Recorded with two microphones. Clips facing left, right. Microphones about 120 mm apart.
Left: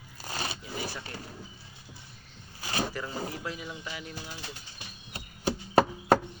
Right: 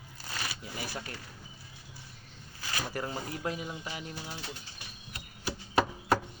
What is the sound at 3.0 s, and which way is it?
Speech, 50° right (ahead or behind).